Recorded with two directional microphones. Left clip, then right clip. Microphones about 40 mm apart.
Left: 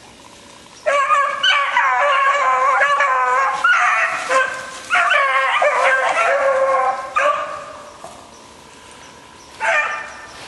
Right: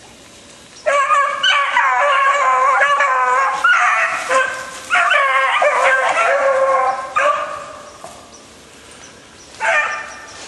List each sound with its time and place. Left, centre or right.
0.8 s dog: left
9.6 s bow-wow: centre